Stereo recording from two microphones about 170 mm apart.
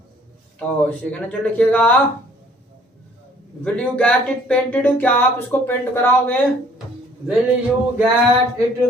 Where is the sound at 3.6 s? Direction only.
5° left (ahead or behind).